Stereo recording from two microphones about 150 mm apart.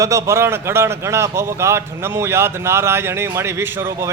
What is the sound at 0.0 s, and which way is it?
A man's voice, 20° right (ahead or behind).